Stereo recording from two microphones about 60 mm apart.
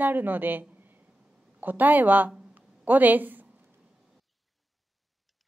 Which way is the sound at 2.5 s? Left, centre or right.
Right.